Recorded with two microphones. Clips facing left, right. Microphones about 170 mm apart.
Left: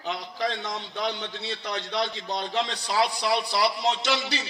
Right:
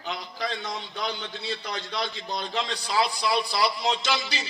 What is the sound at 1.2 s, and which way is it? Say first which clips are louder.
A man's voice: even; 75° left (ahead or behind).